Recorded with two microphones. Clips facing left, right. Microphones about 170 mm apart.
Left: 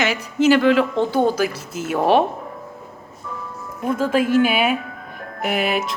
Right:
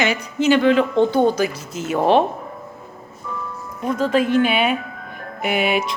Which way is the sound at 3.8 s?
5° left (ahead or behind).